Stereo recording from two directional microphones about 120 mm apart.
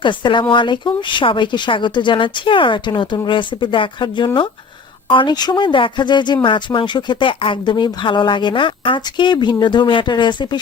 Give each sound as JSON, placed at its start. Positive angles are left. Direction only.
{"t": 0.0, "sound": "speech", "side_deg": 40}